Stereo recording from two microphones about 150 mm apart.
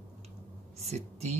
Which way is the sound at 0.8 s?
45° right (ahead or behind).